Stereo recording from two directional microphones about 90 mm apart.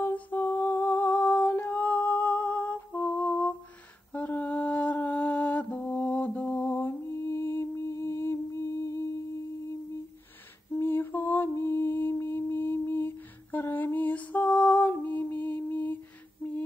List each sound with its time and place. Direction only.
0.0 s humming: 20° left (ahead or behind)
4.1 s mantra: 15° left (ahead or behind)
10.7 s mantra: 25° left (ahead or behind)